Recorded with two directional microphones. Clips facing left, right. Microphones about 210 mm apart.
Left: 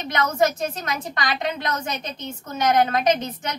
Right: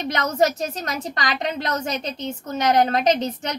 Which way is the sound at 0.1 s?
40° right (ahead or behind).